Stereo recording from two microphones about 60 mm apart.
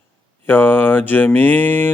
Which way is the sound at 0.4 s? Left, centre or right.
Left.